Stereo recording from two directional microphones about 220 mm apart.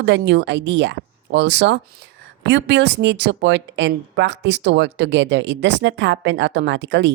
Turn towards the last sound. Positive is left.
turn(degrees=-55)  # may be behind; listen again after turning